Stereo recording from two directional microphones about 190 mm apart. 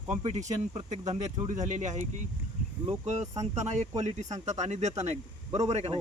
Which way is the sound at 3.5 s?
35° right (ahead or behind).